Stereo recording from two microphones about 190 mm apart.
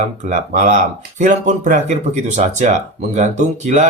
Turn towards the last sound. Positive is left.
turn(degrees=-40)  # may be behind; listen again after turning